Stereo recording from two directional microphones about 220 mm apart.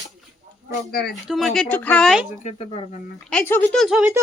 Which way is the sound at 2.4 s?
30° left (ahead or behind).